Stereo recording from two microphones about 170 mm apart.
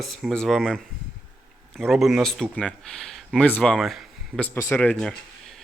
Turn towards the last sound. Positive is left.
turn(degrees=5)  # may be behind; listen again after turning